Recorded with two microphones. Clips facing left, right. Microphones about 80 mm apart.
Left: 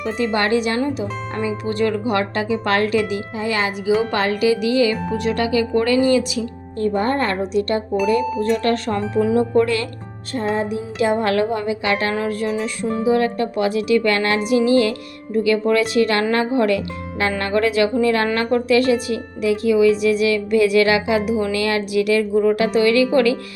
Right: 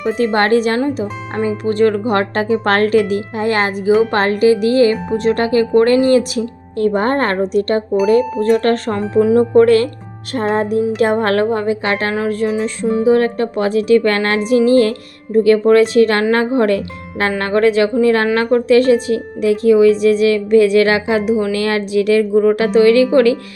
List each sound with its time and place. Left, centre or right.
0.0 s a woman's voice: right
12.1 s music: right
13.0 s a woman's voice: right
23.1 s music: right